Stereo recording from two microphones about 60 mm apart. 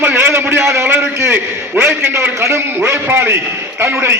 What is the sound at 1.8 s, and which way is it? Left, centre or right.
Speech, right.